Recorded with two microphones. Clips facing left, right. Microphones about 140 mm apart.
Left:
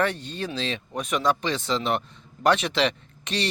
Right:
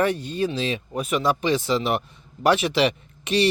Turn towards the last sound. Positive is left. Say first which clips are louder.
# right 8 dB
turn(degrees=-10)  # may be behind; listen again after turning